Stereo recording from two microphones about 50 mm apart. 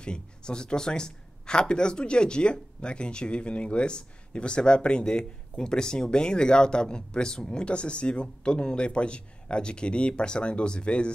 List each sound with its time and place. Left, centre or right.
0.0 s speech: centre